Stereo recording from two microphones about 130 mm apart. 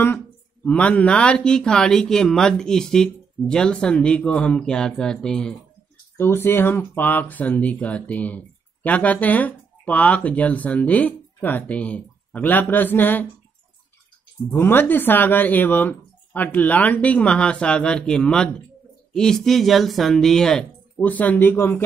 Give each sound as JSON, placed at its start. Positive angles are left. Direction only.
{"t": 0.7, "sound": "speech", "side_deg": 10}
{"t": 6.1, "sound": "speech", "side_deg": 15}
{"t": 14.5, "sound": "speech", "side_deg": 15}